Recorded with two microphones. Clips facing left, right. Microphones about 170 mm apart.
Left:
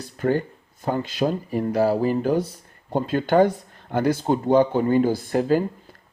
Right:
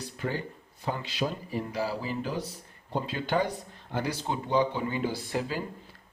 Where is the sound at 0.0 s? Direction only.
50° left (ahead or behind).